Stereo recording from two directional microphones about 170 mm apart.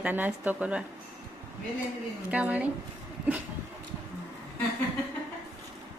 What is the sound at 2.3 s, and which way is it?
Speech, 10° right (ahead or behind).